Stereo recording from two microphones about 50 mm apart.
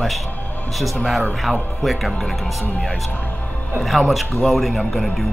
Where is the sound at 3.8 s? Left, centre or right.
Centre.